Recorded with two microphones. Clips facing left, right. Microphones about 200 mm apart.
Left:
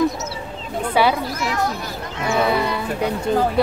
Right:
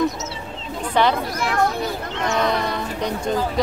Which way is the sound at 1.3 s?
55° right (ahead or behind).